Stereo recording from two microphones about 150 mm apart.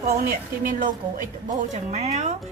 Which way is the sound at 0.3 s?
65° right (ahead or behind).